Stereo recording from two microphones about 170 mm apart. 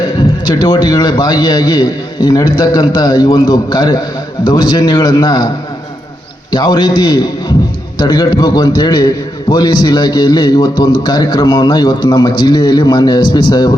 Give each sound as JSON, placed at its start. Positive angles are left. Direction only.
{"t": 0.5, "sound": "a man's voice", "side_deg": 25}
{"t": 6.5, "sound": "a man's voice", "side_deg": 25}